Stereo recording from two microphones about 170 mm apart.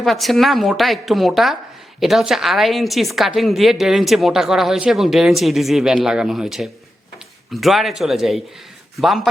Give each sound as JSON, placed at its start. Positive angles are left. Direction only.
{"t": 0.0, "sound": "a woman's voice", "side_deg": 0}